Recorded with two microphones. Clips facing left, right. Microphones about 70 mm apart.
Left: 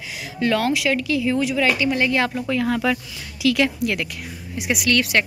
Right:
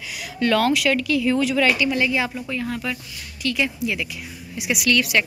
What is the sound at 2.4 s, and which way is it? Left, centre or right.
Speech, left.